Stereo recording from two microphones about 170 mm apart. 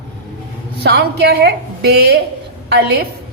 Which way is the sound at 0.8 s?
70° right (ahead or behind).